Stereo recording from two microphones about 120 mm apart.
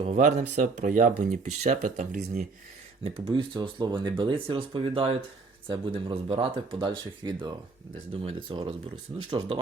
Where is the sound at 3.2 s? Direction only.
45° right (ahead or behind).